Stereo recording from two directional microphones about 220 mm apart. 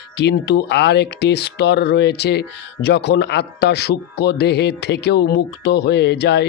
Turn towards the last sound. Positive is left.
turn(degrees=50)  # may be behind; listen again after turning